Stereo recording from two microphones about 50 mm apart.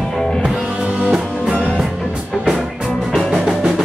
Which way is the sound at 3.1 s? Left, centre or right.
Centre.